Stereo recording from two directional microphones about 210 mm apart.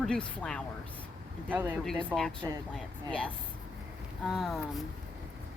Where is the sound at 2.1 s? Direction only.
5° left (ahead or behind).